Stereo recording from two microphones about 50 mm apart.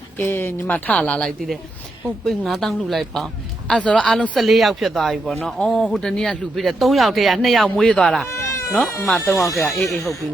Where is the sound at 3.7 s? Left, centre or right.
Left.